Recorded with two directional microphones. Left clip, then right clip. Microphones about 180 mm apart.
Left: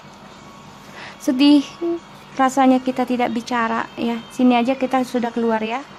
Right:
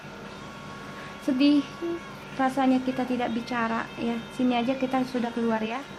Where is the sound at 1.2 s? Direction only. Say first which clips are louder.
Left 8 dB; 45° left (ahead or behind).